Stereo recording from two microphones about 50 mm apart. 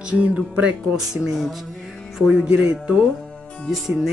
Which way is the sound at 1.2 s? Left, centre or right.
Centre.